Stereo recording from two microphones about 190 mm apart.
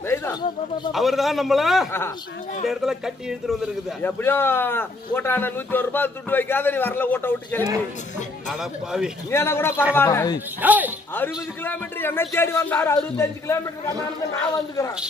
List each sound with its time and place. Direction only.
0.0 s a sound: 15° left (ahead or behind)
0.9 s a man's voice: centre (ahead or behind)
1.9 s a man's voice: 10° left (ahead or behind)
2.6 s a man's voice: centre (ahead or behind)
4.0 s a man's voice: 10° left (ahead or behind)
8.5 s a man's voice: centre (ahead or behind)
9.3 s a man's voice: 15° left (ahead or behind)
10.6 s speech: 10° right (ahead or behind)
11.1 s a man's voice: 10° left (ahead or behind)